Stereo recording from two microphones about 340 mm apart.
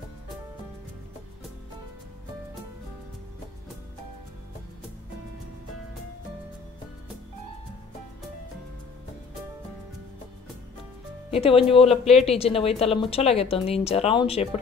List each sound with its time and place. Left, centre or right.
11.2 s speech: centre